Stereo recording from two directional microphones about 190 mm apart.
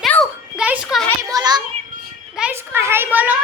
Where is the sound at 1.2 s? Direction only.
20° right (ahead or behind).